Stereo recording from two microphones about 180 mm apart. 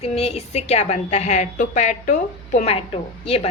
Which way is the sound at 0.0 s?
35° left (ahead or behind).